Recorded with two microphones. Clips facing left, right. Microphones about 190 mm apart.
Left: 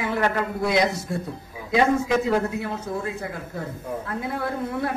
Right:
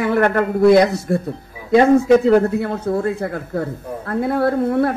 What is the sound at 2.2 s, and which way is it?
A man's voice, 65° right (ahead or behind).